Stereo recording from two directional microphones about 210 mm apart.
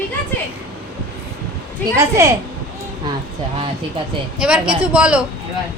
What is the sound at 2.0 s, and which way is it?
Speech, 15° right (ahead or behind).